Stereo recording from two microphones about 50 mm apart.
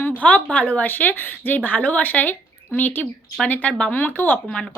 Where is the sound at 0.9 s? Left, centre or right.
Left.